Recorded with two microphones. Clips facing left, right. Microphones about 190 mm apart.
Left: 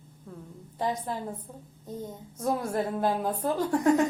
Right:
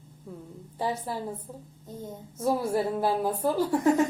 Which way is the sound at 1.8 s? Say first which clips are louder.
Left 3 dB; 20° left (ahead or behind).